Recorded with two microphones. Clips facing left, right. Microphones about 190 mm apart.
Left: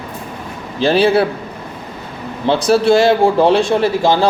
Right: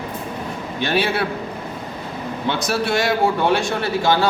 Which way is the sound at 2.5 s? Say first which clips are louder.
Left 10 dB; 30° left (ahead or behind).